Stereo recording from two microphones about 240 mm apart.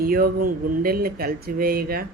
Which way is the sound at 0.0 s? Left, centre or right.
Right.